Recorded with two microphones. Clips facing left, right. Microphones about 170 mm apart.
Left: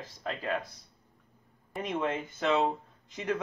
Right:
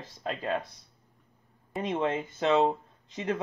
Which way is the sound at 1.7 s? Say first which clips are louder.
Right 3 dB; 25° right (ahead or behind).